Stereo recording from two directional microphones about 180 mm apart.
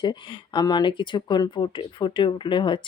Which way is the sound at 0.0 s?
25° left (ahead or behind).